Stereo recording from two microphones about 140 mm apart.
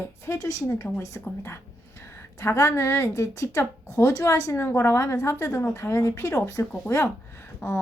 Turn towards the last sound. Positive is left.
turn(degrees=20)  # may be behind; listen again after turning